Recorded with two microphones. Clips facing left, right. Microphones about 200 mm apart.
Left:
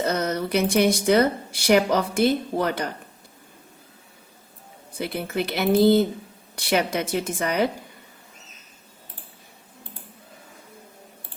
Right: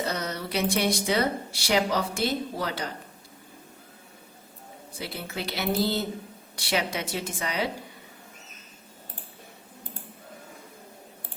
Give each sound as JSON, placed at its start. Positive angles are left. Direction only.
{"t": 0.0, "sound": "speech", "side_deg": 50}
{"t": 4.9, "sound": "a woman's voice", "side_deg": 55}